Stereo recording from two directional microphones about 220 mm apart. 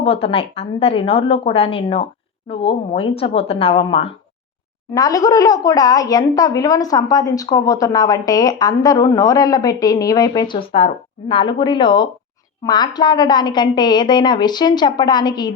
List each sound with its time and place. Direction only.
0.0 s a woman's voice: 25° left (ahead or behind)
4.9 s a woman's voice: 15° left (ahead or behind)